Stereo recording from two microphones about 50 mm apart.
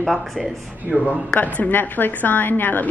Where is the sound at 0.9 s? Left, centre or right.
Right.